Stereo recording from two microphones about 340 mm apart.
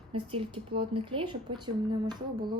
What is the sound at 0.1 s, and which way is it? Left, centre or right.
A woman's voice, centre.